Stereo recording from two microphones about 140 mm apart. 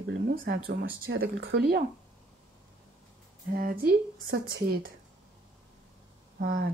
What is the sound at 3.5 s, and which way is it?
Speech, 90° right.